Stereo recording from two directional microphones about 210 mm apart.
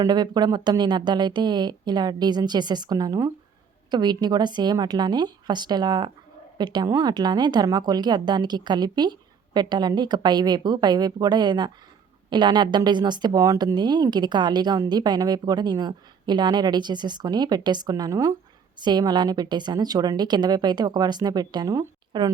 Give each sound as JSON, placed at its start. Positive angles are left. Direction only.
{"t": 0.0, "sound": "a woman's voice", "side_deg": -20}